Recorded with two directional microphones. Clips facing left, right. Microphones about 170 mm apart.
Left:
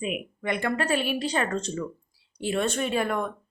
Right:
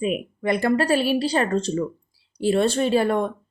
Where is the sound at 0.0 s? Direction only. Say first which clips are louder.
Right 6 dB; 35° right (ahead or behind).